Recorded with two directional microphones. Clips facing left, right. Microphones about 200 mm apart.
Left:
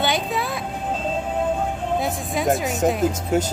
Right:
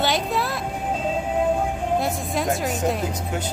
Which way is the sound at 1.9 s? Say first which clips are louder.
Even; centre (ahead or behind).